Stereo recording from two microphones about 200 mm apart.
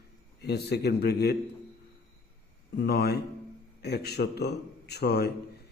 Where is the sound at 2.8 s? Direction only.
55° left (ahead or behind).